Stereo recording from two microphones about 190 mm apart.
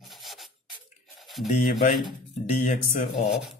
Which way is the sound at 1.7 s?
Centre (ahead or behind).